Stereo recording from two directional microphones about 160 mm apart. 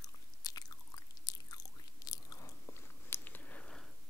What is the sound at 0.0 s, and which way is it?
Chewing, 25° left (ahead or behind).